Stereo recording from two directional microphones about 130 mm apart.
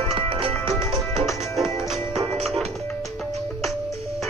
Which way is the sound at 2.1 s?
55° right (ahead or behind).